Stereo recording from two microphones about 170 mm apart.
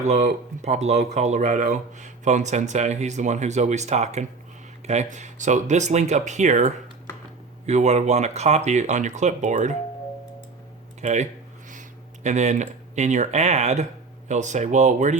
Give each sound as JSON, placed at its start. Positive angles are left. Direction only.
{"t": 0.0, "sound": "speech", "side_deg": -40}
{"t": 11.0, "sound": "speech", "side_deg": -45}